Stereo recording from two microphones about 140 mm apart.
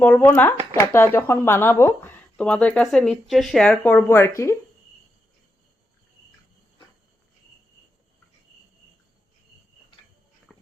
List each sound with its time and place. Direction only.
0.0 s speech: 15° left (ahead or behind)
3.9 s speech: 20° left (ahead or behind)
10.5 s a sound: centre (ahead or behind)